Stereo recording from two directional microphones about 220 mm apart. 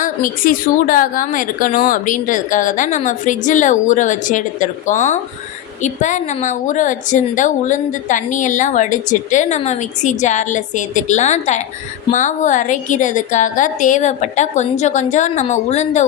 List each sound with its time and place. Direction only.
0.0 s a woman's voice: 40° left (ahead or behind)